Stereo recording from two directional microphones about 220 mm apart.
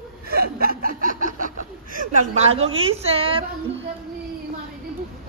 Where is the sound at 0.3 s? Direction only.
45° right (ahead or behind).